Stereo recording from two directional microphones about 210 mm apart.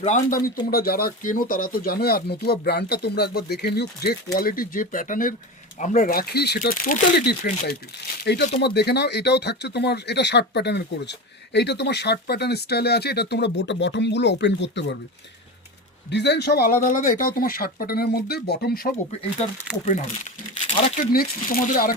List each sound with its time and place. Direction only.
0.0 s speech: 40° left (ahead or behind)
8.2 s speech: 50° left (ahead or behind)
16.0 s speech: 55° left (ahead or behind)
19.4 s speech: 30° left (ahead or behind)
20.7 s speech: 35° left (ahead or behind)